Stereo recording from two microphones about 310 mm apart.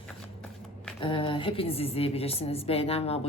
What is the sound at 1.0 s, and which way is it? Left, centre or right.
A woman's voice, centre.